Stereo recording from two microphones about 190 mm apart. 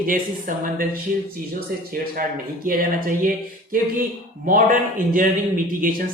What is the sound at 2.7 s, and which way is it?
A man's voice, 50° right (ahead or behind).